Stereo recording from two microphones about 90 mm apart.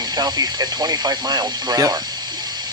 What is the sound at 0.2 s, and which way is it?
Speech, 45° right (ahead or behind).